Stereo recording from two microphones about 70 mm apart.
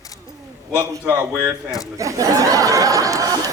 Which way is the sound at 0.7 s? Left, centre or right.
Right.